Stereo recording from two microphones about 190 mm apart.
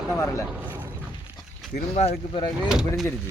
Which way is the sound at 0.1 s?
15° left (ahead or behind).